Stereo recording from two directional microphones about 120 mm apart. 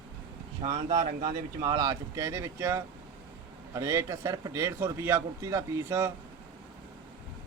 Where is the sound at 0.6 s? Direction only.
60° right (ahead or behind).